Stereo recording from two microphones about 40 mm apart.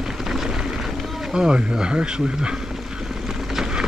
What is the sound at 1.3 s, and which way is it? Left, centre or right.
Speech, centre.